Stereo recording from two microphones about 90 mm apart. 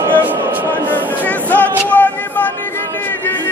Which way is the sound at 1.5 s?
20° left (ahead or behind).